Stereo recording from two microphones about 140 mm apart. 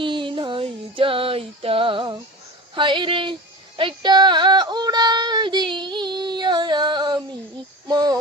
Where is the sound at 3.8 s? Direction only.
35° right (ahead or behind).